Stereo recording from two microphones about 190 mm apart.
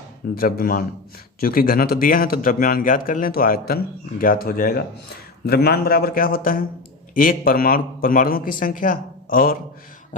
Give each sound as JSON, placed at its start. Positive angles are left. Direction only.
{"t": 0.3, "sound": "a man's voice", "side_deg": 50}